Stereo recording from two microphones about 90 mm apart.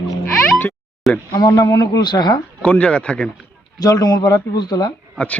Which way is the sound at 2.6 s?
10° left (ahead or behind).